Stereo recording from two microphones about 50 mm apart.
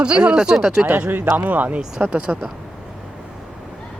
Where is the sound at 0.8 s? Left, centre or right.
Right.